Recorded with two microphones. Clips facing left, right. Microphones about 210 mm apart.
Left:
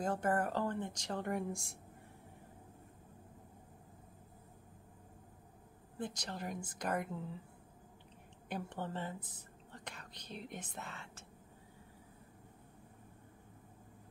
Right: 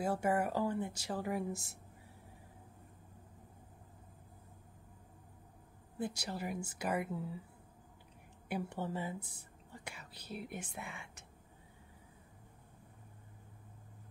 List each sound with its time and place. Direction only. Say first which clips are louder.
0.0 s speech: right 1 dB; 10° right (ahead or behind)
5.9 s speech: right 3 dB; 10° right (ahead or behind)
8.5 s speech: right 3 dB; 10° right (ahead or behind)